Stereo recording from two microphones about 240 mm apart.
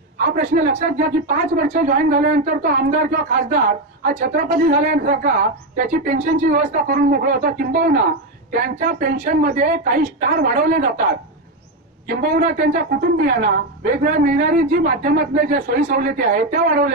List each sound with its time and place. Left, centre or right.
0.6 s speech: right
12.1 s speech: right